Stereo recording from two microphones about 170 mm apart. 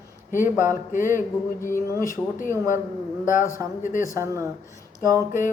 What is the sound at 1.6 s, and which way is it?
Speech, 15° left (ahead or behind).